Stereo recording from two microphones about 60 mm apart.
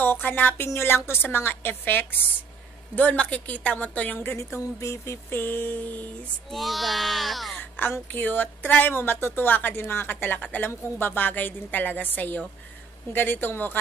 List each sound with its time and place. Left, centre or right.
0.0 s a woman's voice: left
0.7 s a woman's voice: left
3.2 s a woman's voice: left
4.7 s a sound: left
5.3 s a woman's voice: left
6.5 s a child's voice: centre
7.5 s a sound: left
8.1 s a woman's voice: left